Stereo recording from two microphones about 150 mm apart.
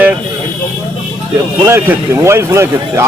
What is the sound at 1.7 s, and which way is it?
Speech, 15° right (ahead or behind).